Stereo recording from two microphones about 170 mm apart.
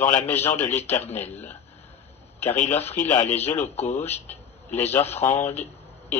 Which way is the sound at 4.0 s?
10° left (ahead or behind).